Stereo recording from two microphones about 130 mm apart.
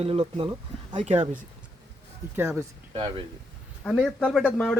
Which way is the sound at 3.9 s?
5° left (ahead or behind).